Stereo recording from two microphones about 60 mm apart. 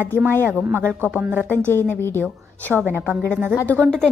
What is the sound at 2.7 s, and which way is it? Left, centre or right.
Speech, right.